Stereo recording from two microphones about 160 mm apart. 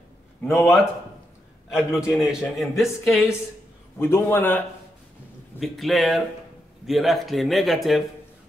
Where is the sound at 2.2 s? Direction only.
Centre (ahead or behind).